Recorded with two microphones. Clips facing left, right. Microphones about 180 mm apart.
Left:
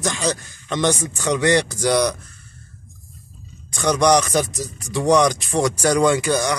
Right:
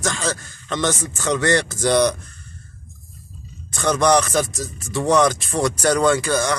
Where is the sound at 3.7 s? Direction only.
15° left (ahead or behind).